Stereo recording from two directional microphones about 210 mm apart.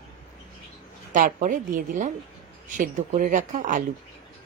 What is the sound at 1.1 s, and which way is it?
A woman's voice, 40° right (ahead or behind).